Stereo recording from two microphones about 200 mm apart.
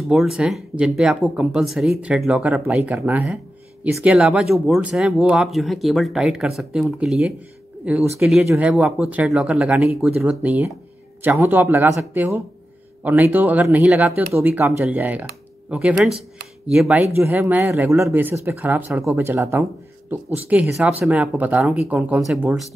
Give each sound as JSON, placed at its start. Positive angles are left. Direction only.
{"t": 0.1, "sound": "speech", "side_deg": 0}